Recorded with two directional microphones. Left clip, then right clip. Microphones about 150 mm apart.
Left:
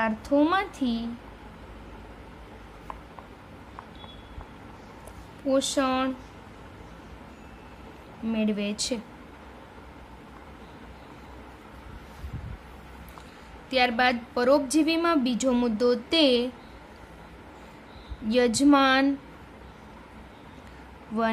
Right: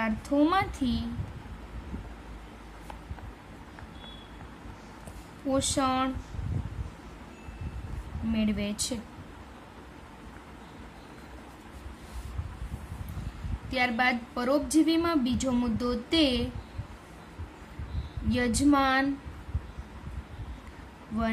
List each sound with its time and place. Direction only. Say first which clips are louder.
0.0 s a woman's voice: left 3 dB; 10° left (ahead or behind)
5.5 s a woman's voice: left 3 dB; 15° left (ahead or behind)
8.3 s a woman's voice: left 3 dB; 15° left (ahead or behind)
13.7 s a woman's voice: left 4 dB; 20° left (ahead or behind)
18.3 s a woman's voice: left 5 dB; 25° left (ahead or behind)